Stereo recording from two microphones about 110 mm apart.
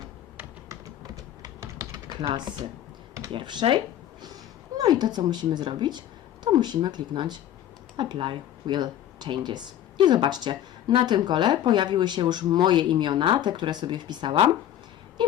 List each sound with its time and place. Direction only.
0.7 s typing: 30° right (ahead or behind)
3.3 s speech: 50° right (ahead or behind)
4.8 s speech: 40° right (ahead or behind)